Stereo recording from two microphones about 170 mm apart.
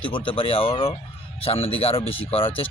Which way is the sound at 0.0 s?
30° left (ahead or behind).